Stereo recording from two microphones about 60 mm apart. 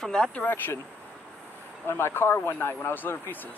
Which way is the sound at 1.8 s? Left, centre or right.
Left.